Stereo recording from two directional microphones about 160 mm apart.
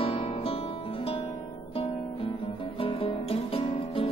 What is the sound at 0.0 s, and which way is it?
Music, 35° left (ahead or behind).